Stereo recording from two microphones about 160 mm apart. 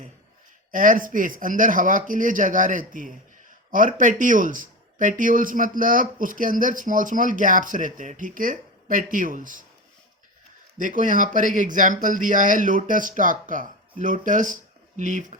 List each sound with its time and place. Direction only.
0.7 s speech: 60° right (ahead or behind)
10.8 s speech: 55° right (ahead or behind)